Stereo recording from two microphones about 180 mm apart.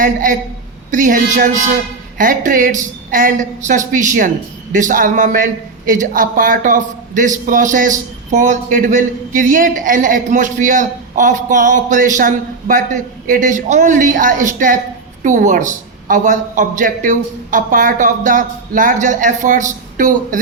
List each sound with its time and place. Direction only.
0.0 s a man's voice: 50° right (ahead or behind)